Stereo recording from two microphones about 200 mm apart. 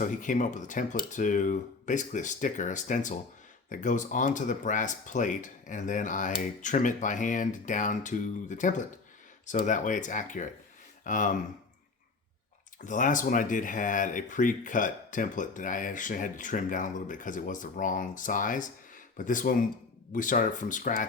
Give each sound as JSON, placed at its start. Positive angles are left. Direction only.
{"t": 0.0, "sound": "speech", "side_deg": 40}
{"t": 12.8, "sound": "speech", "side_deg": 40}